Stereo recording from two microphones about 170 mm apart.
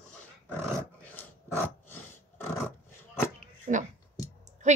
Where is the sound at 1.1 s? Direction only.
10° left (ahead or behind).